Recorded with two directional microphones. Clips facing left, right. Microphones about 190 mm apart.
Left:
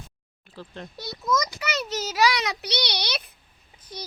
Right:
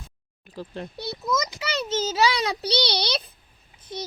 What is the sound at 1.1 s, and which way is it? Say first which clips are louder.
A child's voice: left 2 dB; 25° right (ahead or behind).